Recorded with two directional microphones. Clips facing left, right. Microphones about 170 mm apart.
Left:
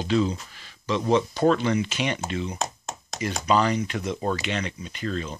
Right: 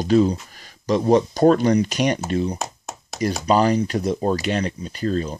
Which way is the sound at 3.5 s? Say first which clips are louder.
Right 4 dB; 35° right (ahead or behind).